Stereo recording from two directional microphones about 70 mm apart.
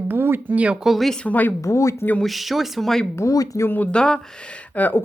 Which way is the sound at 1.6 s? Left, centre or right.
Left.